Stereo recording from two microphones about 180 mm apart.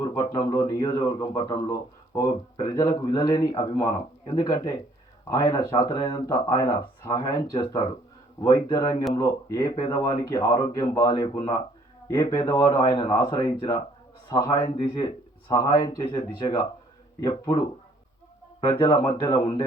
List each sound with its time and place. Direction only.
0.3 s speech: 15° left (ahead or behind)
18.6 s speech: 20° left (ahead or behind)